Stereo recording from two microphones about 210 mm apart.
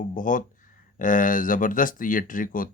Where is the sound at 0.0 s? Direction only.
40° left (ahead or behind).